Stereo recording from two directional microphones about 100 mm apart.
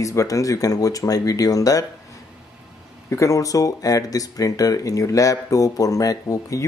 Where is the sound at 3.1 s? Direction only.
30° left (ahead or behind).